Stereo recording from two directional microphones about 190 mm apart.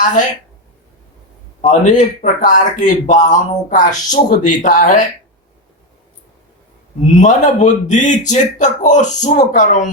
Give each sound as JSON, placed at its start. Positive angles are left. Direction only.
{"t": 0.0, "sound": "a man's voice", "side_deg": 40}
{"t": 1.6, "sound": "a man's voice", "side_deg": 40}
{"t": 7.2, "sound": "a man's voice", "side_deg": 40}